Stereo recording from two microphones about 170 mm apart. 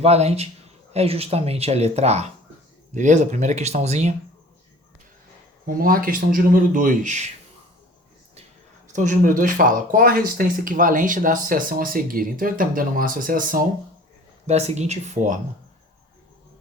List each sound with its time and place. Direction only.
0.0 s speech: 40° right (ahead or behind)
5.6 s speech: 55° right (ahead or behind)
8.9 s speech: 50° right (ahead or behind)
14.4 s speech: 40° right (ahead or behind)